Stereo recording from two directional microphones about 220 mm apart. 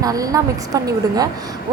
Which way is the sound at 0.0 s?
15° right (ahead or behind).